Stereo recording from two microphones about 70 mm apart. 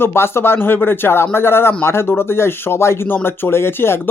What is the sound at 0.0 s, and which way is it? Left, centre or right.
Speech, left.